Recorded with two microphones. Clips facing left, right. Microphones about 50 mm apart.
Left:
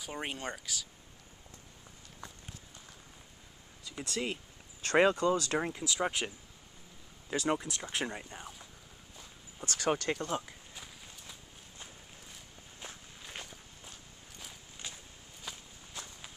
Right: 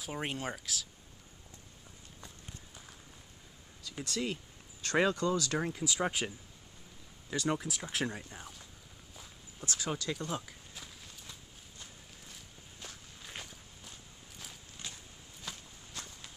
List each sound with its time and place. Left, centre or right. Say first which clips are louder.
0.0 s speech: right 1 dB; centre
4.0 s speech: even; centre
5.7 s speech: even; centre
7.2 s speech: left 2 dB; left
7.5 s speech: left 1 dB; centre
8.1 s speech: left 1 dB; centre
9.7 s speech: left 5 dB; left
10.1 s a sound: left 3 dB; centre
12.8 s walk: left 2 dB; left
13.2 s walk: even; centre
14.8 s a sound: even; centre
15.5 s walk: even; centre